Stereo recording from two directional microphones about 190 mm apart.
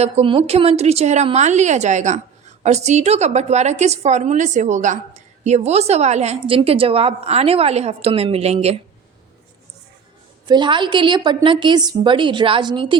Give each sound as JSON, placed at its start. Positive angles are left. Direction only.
{"t": 0.0, "sound": "a woman's voice", "side_deg": -30}
{"t": 10.4, "sound": "a woman's voice", "side_deg": -25}